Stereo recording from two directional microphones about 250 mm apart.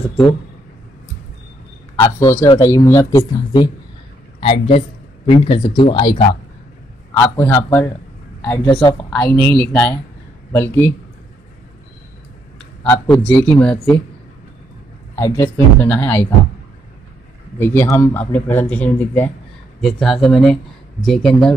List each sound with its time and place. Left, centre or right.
2.1 s a woman's voice: centre
7.2 s speech: centre
12.5 s speech: centre
15.1 s speech: centre
17.6 s speech: centre